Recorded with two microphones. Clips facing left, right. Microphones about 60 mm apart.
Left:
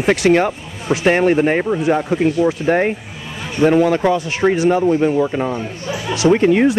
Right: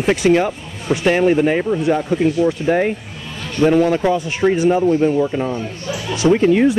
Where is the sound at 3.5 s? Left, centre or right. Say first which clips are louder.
Left 1 dB; centre.